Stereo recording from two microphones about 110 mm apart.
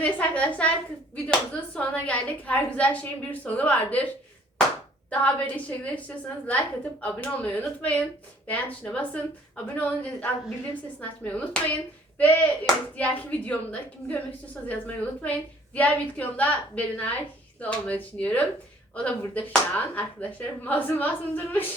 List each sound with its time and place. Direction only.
0.0 s speech: 15° left (ahead or behind)
5.2 s speech: 15° left (ahead or behind)